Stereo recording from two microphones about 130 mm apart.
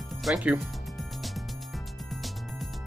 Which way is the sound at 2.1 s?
Centre (ahead or behind).